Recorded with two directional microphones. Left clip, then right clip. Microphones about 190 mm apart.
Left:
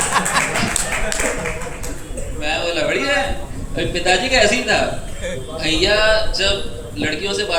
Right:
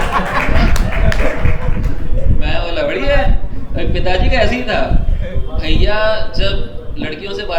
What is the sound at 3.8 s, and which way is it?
A man's voice, 30° right (ahead or behind).